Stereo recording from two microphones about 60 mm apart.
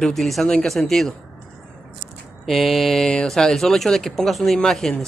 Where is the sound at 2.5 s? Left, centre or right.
Centre.